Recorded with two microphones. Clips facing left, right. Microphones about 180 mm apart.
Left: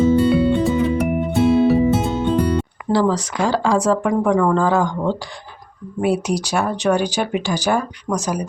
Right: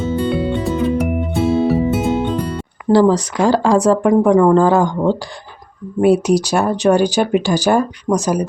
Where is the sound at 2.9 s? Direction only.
45° right (ahead or behind).